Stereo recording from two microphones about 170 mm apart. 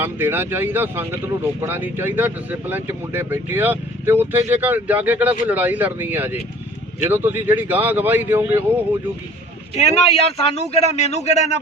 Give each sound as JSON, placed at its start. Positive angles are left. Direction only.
{"t": 0.0, "sound": "speech", "side_deg": -10}
{"t": 9.7, "sound": "a man's voice", "side_deg": 35}